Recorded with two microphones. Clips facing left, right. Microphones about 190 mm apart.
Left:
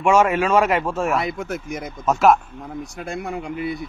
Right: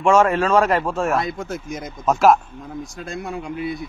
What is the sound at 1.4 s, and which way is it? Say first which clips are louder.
Speech: left 1 dB; 60° left (ahead or behind).